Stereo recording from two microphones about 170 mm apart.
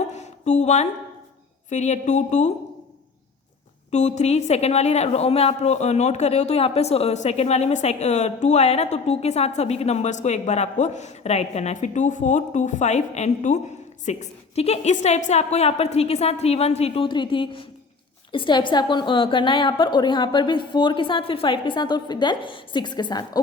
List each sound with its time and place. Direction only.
0.1 s a sound: 45° left (ahead or behind)
1.7 s speech: 45° left (ahead or behind)
3.9 s a woman's voice: 45° left (ahead or behind); by 23.4 s 25° left (ahead or behind)